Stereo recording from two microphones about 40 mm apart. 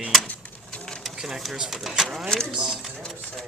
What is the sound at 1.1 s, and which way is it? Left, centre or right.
Speech, centre.